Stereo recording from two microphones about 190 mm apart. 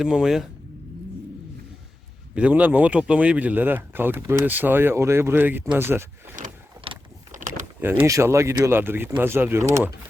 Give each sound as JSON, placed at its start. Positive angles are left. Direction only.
{"t": 0.0, "sound": "speech", "side_deg": -5}
{"t": 2.3, "sound": "speech", "side_deg": -5}
{"t": 6.4, "sound": "vehicle", "side_deg": -45}
{"t": 6.8, "sound": "mechanisms", "side_deg": -30}
{"t": 7.3, "sound": "power windows", "side_deg": -45}
{"t": 8.0, "sound": "speech", "side_deg": -15}